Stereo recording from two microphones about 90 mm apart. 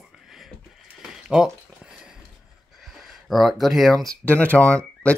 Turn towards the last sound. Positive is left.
turn(degrees=15)  # may be behind; listen again after turning